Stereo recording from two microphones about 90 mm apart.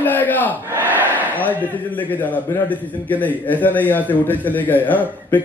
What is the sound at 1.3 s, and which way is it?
A man's voice, 20° left (ahead or behind).